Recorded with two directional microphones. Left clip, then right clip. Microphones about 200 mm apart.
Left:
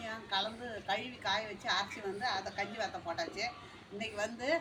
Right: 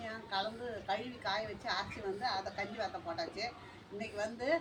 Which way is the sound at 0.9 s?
5° left (ahead or behind).